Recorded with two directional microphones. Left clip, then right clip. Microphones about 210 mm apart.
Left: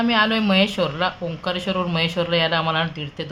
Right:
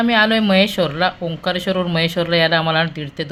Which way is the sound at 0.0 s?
20° right (ahead or behind).